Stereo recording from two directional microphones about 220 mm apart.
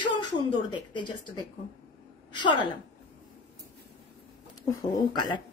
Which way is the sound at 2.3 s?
20° left (ahead or behind).